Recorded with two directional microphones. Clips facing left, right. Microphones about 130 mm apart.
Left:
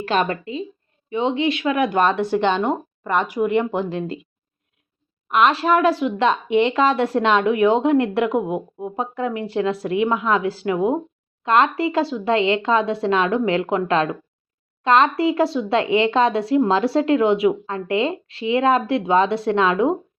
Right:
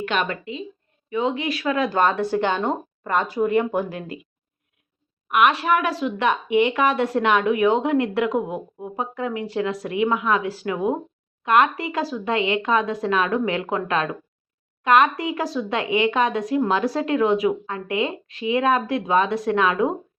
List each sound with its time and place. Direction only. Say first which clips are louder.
0.0 s speech: left 4 dB; 35° left (ahead or behind)
5.3 s speech: left 2 dB; 30° left (ahead or behind)